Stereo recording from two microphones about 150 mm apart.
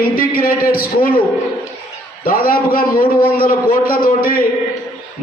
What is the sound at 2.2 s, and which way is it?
A man's voice, 75° left (ahead or behind).